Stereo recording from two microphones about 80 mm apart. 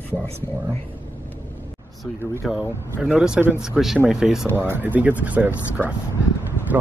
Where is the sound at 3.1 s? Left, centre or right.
Centre.